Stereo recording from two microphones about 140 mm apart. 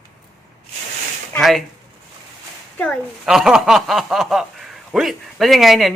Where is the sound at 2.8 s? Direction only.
5° left (ahead or behind).